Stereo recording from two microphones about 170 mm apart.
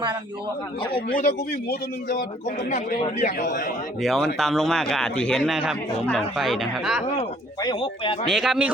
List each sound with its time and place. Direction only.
3.2 s a man's voice: 45° left (ahead or behind)
4.0 s a man's voice: centre (ahead or behind)
7.6 s speech: 25° left (ahead or behind)
8.3 s a man's voice: centre (ahead or behind)